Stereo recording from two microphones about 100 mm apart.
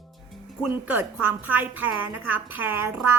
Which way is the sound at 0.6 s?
10° right (ahead or behind).